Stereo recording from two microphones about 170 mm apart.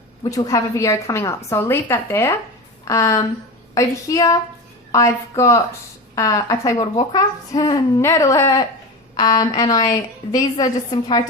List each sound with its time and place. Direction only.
0.2 s speech: 20° left (ahead or behind)